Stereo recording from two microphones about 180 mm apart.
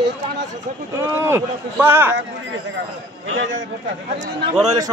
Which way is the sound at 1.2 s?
15° right (ahead or behind).